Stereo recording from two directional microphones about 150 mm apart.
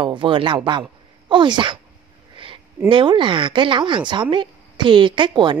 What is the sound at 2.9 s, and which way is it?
A woman's voice, 35° right (ahead or behind).